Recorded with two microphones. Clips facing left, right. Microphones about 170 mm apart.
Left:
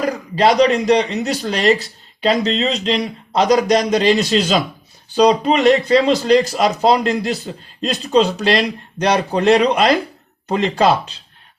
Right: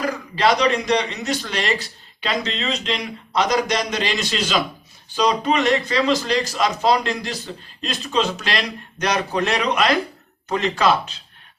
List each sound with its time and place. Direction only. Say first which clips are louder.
0.1 s speech: left 5 dB; 35° left (ahead or behind)